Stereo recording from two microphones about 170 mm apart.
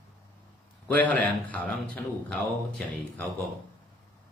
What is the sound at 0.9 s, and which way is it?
Speech, 10° left (ahead or behind).